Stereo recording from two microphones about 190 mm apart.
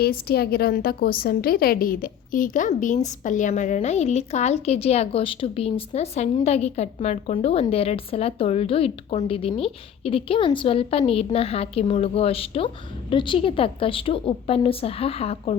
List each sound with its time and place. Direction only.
0.0 s a woman's voice: 55° left (ahead or behind); by 15.5 s 30° left (ahead or behind)